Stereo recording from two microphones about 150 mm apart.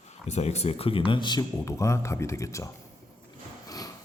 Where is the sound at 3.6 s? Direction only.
25° left (ahead or behind).